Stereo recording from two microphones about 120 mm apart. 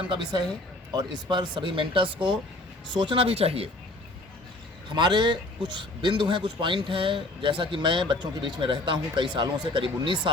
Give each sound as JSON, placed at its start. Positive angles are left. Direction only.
{"t": 0.1, "sound": "speech", "side_deg": -40}
{"t": 4.9, "sound": "speech", "side_deg": -40}